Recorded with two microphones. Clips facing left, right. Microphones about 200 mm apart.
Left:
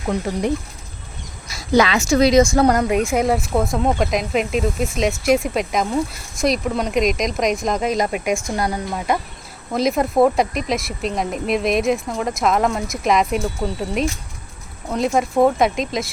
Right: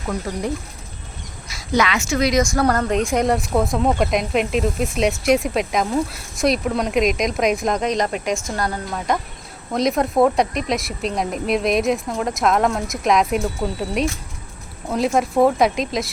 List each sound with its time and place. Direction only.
1.5 s a woman's voice: 30° left (ahead or behind); by 16.1 s centre (ahead or behind)